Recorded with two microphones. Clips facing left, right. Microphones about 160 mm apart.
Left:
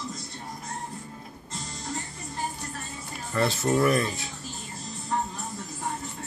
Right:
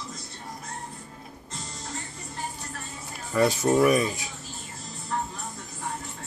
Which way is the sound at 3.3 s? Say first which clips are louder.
Right 3 dB; 15° right (ahead or behind).